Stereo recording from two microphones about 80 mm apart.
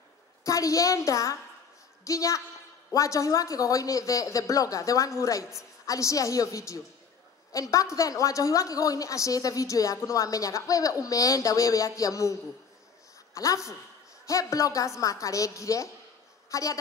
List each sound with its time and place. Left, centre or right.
0.5 s a woman's voice: left